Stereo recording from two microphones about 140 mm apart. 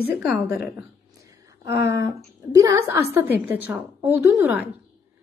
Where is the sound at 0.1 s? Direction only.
10° right (ahead or behind).